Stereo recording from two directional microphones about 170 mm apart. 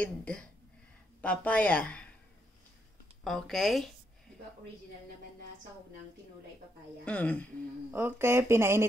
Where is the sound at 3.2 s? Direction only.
Centre (ahead or behind).